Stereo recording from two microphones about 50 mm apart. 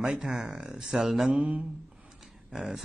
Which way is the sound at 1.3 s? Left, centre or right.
Right.